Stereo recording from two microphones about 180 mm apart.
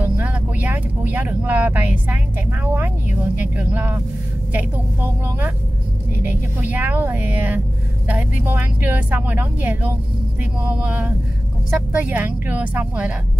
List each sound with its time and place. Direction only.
0.0 s vehicle: 10° right (ahead or behind)
2.6 s speech: 10° right (ahead or behind)
6.2 s speech: 10° right (ahead or behind)